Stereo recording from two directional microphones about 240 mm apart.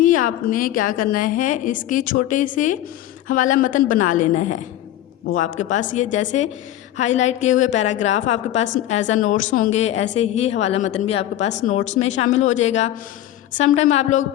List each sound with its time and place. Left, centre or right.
0.0 s a woman's voice: left